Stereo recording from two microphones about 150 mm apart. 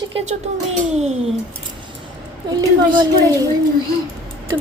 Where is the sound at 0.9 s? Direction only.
45° right (ahead or behind).